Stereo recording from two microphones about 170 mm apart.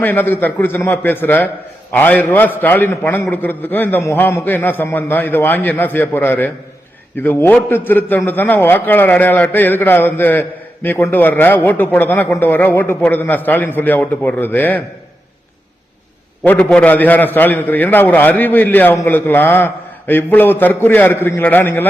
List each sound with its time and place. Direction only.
0.0 s a man's voice: 10° left (ahead or behind)
16.4 s a man's voice: 10° left (ahead or behind)